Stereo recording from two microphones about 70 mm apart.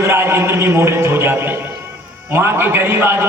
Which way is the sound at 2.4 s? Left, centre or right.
Right.